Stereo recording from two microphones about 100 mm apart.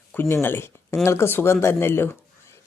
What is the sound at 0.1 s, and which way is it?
Speech, 20° left (ahead or behind).